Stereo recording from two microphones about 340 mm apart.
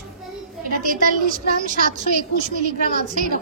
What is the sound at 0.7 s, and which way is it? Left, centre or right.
Speech, right.